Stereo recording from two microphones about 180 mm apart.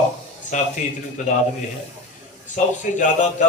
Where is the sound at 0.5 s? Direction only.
45° left (ahead or behind).